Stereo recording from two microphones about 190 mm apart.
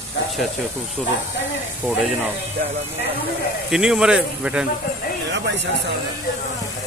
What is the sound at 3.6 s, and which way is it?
Speech, 5° right (ahead or behind).